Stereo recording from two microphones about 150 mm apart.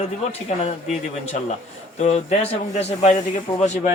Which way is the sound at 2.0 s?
50° left (ahead or behind).